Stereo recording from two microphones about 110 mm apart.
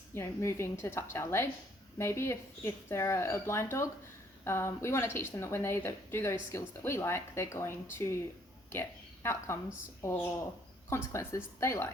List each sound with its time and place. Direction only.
0.1 s speech: 25° left (ahead or behind)
10.8 s speech: 25° left (ahead or behind)